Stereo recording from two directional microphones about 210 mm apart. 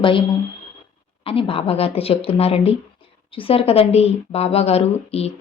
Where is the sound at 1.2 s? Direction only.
25° left (ahead or behind).